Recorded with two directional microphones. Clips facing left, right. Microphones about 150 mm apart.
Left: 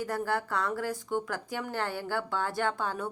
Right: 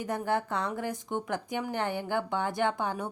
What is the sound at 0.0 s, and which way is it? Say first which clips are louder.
A woman's voice: right 1 dB; 20° right (ahead or behind).